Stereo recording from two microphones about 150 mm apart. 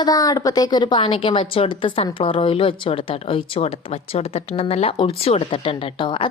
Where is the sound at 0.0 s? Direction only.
25° left (ahead or behind).